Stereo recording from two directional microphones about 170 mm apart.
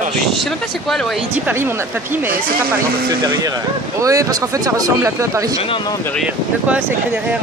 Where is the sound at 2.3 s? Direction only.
60° right (ahead or behind).